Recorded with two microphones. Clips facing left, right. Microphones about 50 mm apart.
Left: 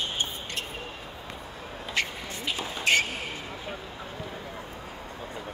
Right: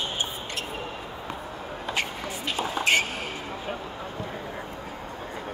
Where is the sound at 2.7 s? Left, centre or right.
Centre.